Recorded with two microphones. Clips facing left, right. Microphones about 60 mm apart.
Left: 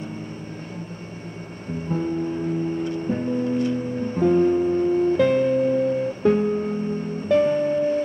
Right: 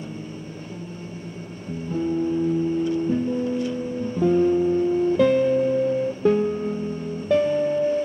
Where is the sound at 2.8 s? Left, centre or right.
Left.